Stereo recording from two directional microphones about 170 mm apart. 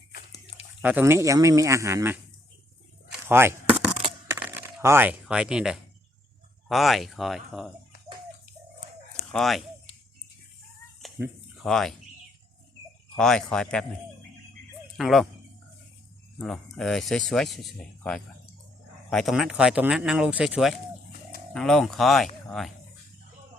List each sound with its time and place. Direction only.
0.1 s a sound: 65° left (ahead or behind)
0.8 s speech: 10° right (ahead or behind)
3.2 s chop: 15° right (ahead or behind)
4.3 s a sound: 15° right (ahead or behind)
6.7 s speech: centre (ahead or behind)
9.1 s a sound: centre (ahead or behind)
11.6 s speech: centre (ahead or behind)
13.1 s speech: 5° left (ahead or behind)
14.9 s speech: centre (ahead or behind)
16.4 s speech: centre (ahead or behind)